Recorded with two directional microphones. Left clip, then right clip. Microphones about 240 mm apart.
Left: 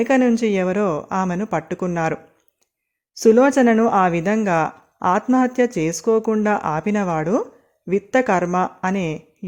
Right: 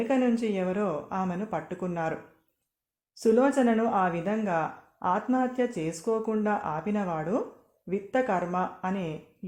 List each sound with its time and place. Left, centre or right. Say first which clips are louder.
0.0 s speech: left 9 dB; left
3.2 s speech: left 9 dB; left